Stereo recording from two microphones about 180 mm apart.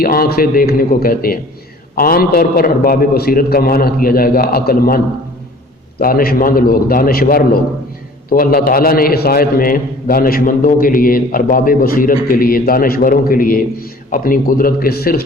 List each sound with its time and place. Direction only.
0.0 s a man's voice: 55° left (ahead or behind)
6.0 s a man's voice: 55° left (ahead or behind)